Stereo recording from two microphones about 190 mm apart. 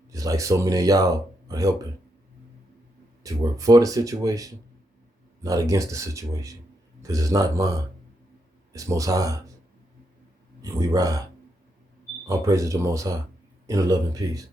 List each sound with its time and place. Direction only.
0.1 s speech: 15° right (ahead or behind)
3.2 s speech: 20° right (ahead or behind)
10.6 s speech: 15° right (ahead or behind)
12.3 s speech: 15° right (ahead or behind)